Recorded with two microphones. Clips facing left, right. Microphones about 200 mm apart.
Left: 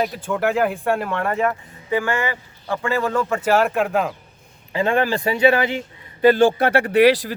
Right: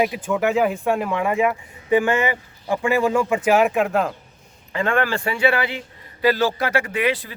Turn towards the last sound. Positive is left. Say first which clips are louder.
# left 8 dB
turn(degrees=75)  # may be behind; listen again after turning